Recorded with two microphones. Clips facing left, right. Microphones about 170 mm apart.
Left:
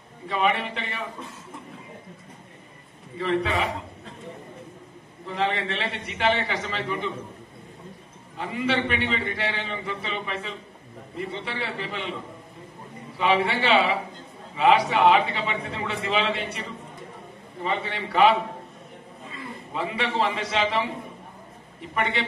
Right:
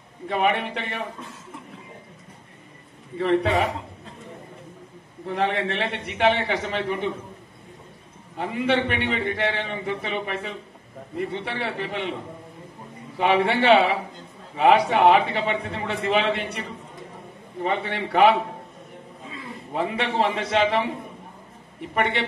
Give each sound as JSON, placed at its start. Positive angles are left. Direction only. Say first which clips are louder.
{"t": 0.3, "sound": "a man's voice", "louder": "right 2 dB", "side_deg": -55}
{"t": 3.2, "sound": "a man's voice", "louder": "right 4 dB", "side_deg": -55}
{"t": 5.2, "sound": "a man's voice", "louder": "right 3 dB", "side_deg": -55}
{"t": 8.4, "sound": "a man's voice", "louder": "right 3 dB", "side_deg": -55}
{"t": 13.2, "sound": "a man's voice", "louder": "right 3 dB", "side_deg": -60}
{"t": 17.6, "sound": "a man's voice", "louder": "right 3 dB", "side_deg": -55}
{"t": 19.7, "sound": "a man's voice", "louder": "right 3 dB", "side_deg": -55}